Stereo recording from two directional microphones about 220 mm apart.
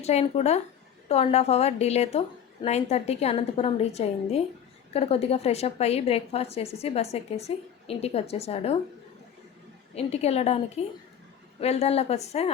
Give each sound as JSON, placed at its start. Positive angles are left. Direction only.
{"t": 0.0, "sound": "a woman's voice", "side_deg": 30}
{"t": 9.9, "sound": "a woman's voice", "side_deg": 30}
{"t": 11.6, "sound": "a woman's voice", "side_deg": 30}